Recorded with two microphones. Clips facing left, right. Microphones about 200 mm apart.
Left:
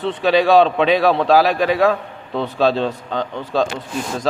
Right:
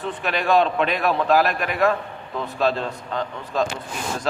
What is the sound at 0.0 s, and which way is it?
A man's voice, 90° left.